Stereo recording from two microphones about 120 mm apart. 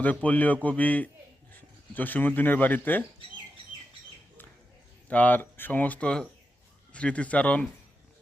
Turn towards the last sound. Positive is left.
turn(degrees=10)  # may be behind; listen again after turning